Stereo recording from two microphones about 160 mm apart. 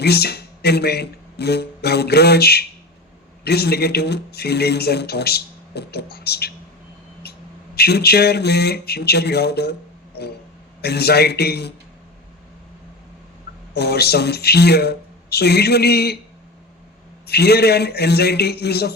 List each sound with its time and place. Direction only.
0.0 s speech: 85° left
7.8 s speech: 85° left
10.8 s speech: 85° left
13.7 s speech: 90° left
17.2 s speech: 85° left